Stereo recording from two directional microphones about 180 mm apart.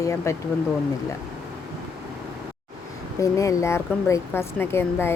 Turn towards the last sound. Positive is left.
turn(degrees=15)  # may be behind; listen again after turning